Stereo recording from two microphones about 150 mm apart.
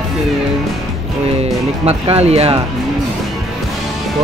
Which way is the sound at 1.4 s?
45° right (ahead or behind).